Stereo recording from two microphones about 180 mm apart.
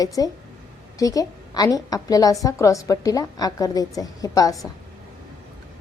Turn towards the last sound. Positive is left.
turn(degrees=20)  # may be behind; listen again after turning